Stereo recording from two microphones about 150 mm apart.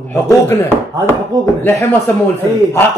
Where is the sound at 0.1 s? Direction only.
15° left (ahead or behind).